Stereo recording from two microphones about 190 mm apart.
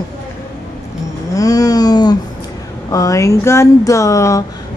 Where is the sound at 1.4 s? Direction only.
20° left (ahead or behind).